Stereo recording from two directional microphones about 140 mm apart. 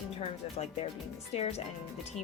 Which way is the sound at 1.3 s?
50° left (ahead or behind).